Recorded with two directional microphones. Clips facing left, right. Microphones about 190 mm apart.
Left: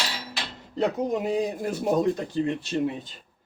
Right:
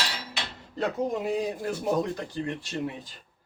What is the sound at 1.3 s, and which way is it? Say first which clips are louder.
Speech: left 2 dB; 20° left (ahead or behind).